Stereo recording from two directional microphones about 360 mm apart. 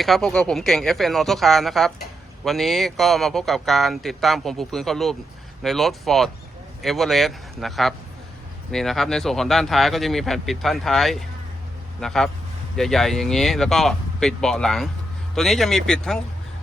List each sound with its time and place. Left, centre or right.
0.0 s speech: centre